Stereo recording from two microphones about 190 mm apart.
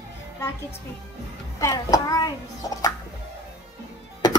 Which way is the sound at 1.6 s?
15° left (ahead or behind).